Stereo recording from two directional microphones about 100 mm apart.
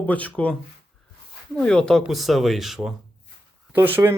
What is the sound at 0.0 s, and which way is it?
Speech, 15° left (ahead or behind).